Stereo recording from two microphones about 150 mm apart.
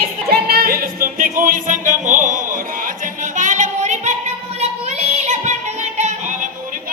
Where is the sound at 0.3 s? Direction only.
90° right; by 6.9 s 60° right (ahead or behind).